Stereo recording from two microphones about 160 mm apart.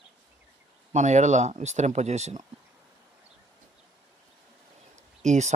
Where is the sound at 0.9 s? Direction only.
45° right (ahead or behind).